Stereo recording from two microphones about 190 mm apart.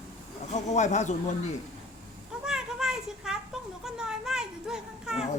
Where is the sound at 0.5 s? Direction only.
40° left (ahead or behind).